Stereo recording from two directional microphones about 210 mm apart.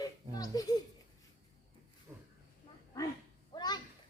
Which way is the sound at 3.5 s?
20° left (ahead or behind).